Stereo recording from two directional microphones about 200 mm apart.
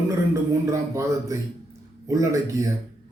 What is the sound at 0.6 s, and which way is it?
Speech, 15° right (ahead or behind).